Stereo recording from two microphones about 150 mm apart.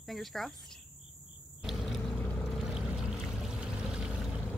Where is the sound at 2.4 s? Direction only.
Centre (ahead or behind).